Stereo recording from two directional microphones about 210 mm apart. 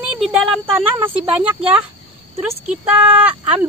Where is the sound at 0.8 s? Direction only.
25° right (ahead or behind).